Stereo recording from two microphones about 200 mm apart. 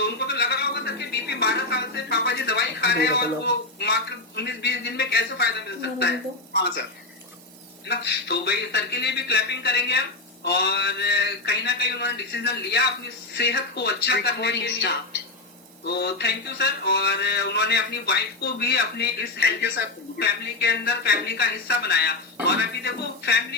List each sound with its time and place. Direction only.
0.0 s a sound: 55° left (ahead or behind)
4.4 s speech: 55° left (ahead or behind)
7.9 s speech: 55° left (ahead or behind)